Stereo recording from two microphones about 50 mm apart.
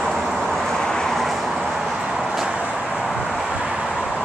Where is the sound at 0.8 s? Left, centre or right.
Centre.